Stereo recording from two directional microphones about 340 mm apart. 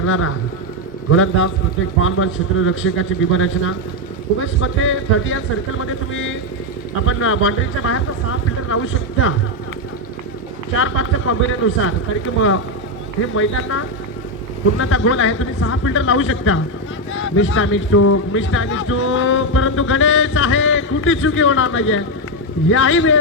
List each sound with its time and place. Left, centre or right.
0.0 s speech: left
10.8 s speech: left
13.3 s speech: left